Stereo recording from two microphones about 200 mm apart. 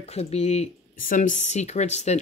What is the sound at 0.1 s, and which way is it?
Speech, 30° left (ahead or behind).